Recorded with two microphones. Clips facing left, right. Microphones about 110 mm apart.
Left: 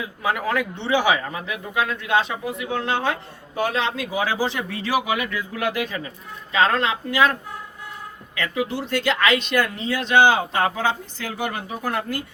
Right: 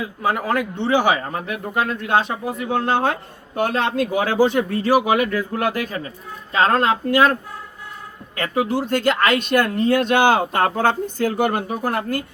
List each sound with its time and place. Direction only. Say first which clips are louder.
0.2 s speech: right 2 dB; 45° right (ahead or behind)
8.4 s speech: right 4 dB; 45° right (ahead or behind)